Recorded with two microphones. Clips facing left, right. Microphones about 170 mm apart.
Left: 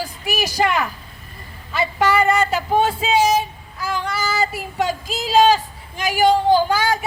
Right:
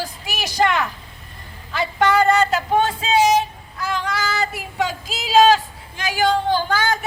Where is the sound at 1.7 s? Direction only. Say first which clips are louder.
Even; 5° left (ahead or behind).